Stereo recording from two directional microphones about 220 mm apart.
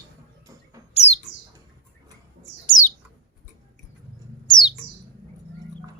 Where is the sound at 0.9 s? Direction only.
30° left (ahead or behind).